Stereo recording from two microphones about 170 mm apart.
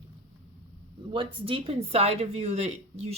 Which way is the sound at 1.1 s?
30° right (ahead or behind).